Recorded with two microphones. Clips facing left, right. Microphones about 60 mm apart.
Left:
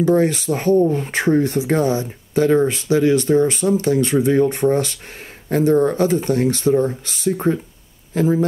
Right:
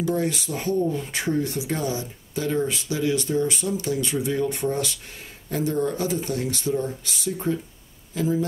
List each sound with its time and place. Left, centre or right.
0.0 s speech: left